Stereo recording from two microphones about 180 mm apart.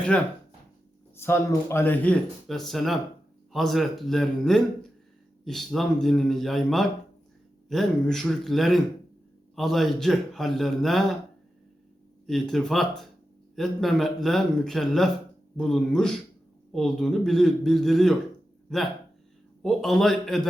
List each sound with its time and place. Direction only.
0.1 s a man's voice: 5° left (ahead or behind)
12.2 s a man's voice: centre (ahead or behind)